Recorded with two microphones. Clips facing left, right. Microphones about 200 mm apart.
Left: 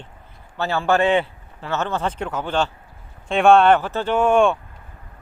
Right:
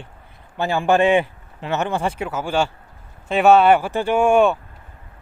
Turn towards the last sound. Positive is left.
turn(degrees=-5)  # may be behind; listen again after turning